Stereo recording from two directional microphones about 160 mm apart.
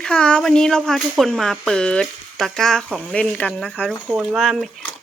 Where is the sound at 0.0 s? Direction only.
5° left (ahead or behind).